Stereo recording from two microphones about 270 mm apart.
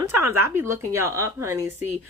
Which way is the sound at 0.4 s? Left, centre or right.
Centre.